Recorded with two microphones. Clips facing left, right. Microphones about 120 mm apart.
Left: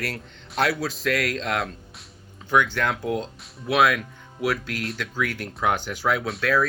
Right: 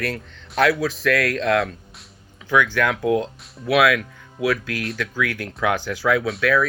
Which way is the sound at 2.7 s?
75° right (ahead or behind).